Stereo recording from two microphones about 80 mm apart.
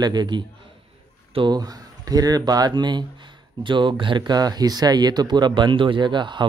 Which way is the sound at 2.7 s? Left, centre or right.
Right.